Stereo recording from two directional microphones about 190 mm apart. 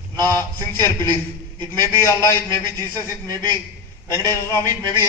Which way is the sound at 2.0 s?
15° left (ahead or behind).